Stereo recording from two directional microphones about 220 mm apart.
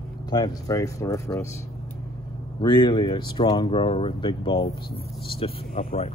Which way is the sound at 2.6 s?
20° left (ahead or behind).